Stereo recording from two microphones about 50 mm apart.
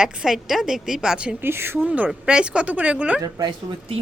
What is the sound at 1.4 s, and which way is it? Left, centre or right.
Speech, right.